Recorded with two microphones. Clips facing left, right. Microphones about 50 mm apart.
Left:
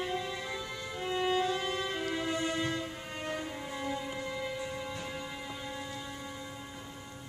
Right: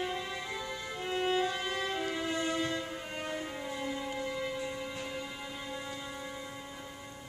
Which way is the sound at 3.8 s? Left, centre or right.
Centre.